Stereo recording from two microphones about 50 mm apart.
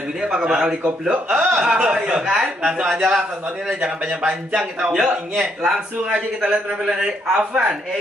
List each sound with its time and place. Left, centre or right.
0.2 s speech: centre
0.8 s speech: right
1.3 s speech: centre
1.8 s speech: right
2.1 s speech: centre